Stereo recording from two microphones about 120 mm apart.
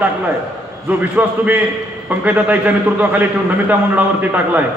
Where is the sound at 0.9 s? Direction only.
15° right (ahead or behind).